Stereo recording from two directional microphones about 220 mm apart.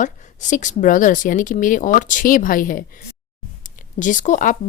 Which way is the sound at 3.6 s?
35° left (ahead or behind).